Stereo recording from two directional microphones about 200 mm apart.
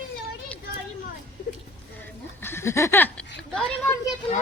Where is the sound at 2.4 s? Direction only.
10° left (ahead or behind).